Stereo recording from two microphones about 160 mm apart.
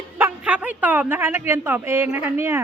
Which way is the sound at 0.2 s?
10° right (ahead or behind).